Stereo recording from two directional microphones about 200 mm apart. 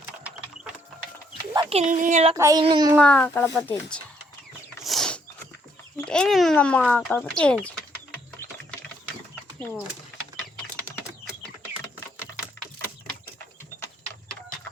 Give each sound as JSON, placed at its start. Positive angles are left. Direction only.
{"t": 1.8, "sound": "speech", "side_deg": -40}
{"t": 2.3, "sound": "speech", "side_deg": -15}
{"t": 3.0, "sound": "speech", "side_deg": 5}
{"t": 4.8, "sound": "a sound", "side_deg": 0}
{"t": 6.0, "sound": "speech", "side_deg": 5}
{"t": 11.3, "sound": "a sound", "side_deg": -5}